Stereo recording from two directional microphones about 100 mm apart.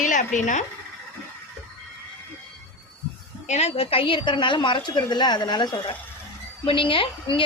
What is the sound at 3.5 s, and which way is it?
A woman's voice, 85° left.